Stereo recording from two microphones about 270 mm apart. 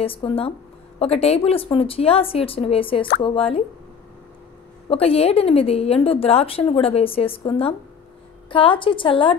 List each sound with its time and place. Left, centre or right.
0.0 s a woman's voice: centre
4.8 s a woman's voice: left